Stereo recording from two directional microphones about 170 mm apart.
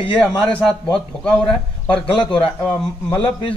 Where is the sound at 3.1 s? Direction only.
30° left (ahead or behind).